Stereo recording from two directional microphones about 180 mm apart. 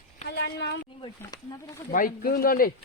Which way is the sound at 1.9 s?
50° left (ahead or behind).